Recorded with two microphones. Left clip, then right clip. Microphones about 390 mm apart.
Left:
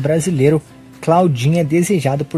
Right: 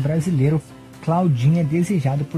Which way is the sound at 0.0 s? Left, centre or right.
Left.